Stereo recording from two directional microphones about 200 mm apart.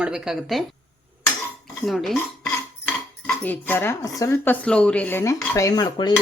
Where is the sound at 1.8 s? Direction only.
Centre (ahead or behind).